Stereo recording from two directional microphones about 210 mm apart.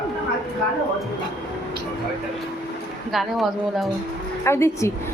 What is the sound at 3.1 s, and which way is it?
Speech, centre (ahead or behind).